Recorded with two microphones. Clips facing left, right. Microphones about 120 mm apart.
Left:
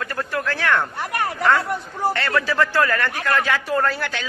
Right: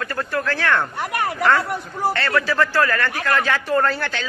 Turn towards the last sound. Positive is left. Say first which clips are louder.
# right 2 dB
turn(degrees=10)  # may be behind; listen again after turning